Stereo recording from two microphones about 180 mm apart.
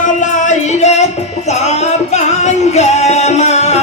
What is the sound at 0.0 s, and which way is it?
Music, 45° left (ahead or behind).